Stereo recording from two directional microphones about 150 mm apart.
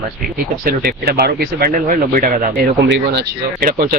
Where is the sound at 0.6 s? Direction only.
80° right; by 2.3 s 65° right (ahead or behind).